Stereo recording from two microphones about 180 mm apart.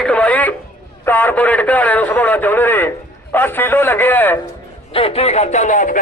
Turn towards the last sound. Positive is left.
turn(degrees=45)  # may be behind; listen again after turning